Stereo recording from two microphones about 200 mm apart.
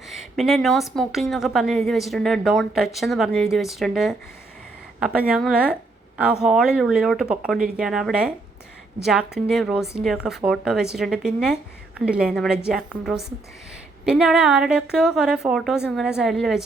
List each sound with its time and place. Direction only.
0.1 s a woman's voice: centre (ahead or behind)